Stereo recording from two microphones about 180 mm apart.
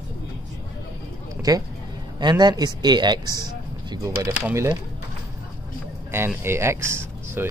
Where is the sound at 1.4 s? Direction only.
20° right (ahead or behind).